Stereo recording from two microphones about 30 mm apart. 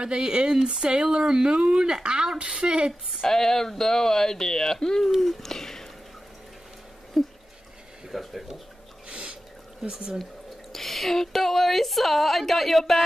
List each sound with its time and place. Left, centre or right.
0.0 s speech: right
2.3 s speech: right
3.3 s speech: centre
5.2 s a sound: centre
7.2 s a sound: centre
8.1 s speech: centre
9.1 s drip: right
9.8 s speech: right
10.7 s speech: centre